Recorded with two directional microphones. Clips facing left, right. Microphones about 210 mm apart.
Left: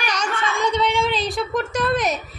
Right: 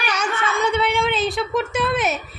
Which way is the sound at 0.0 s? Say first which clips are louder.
Right 1 dB; 5° right (ahead or behind).